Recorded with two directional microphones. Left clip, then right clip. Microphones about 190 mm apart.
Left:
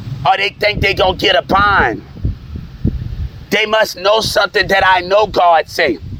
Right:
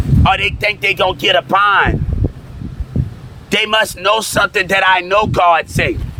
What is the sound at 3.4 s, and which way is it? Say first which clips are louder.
A man's voice: left 1 dB; 10° left (ahead or behind).